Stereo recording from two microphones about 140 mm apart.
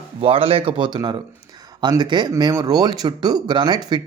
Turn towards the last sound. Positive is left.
turn(degrees=-35)  # may be behind; listen again after turning